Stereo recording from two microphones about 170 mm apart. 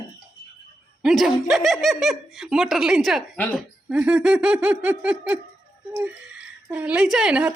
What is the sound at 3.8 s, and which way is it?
Laughter, 5° right (ahead or behind).